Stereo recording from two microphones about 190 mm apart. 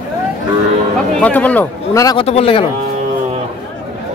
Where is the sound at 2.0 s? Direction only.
30° left (ahead or behind).